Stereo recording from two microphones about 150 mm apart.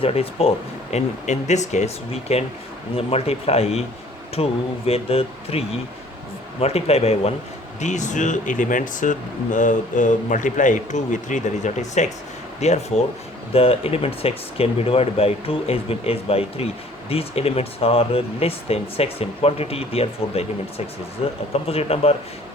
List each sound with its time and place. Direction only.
0.0 s speech: 40° left (ahead or behind)